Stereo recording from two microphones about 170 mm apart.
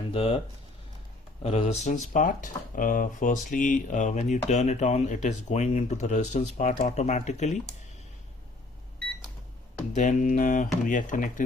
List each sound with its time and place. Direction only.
0.1 s speech: 35° left (ahead or behind)
1.5 s speech: 40° left (ahead or behind)
9.9 s speech: 45° left (ahead or behind)